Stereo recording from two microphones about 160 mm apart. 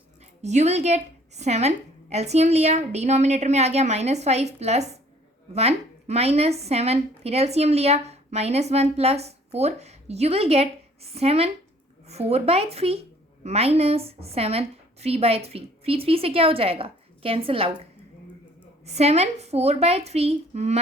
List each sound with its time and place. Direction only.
0.4 s a woman's voice: 45° right (ahead or behind)
18.9 s a woman's voice: 40° right (ahead or behind)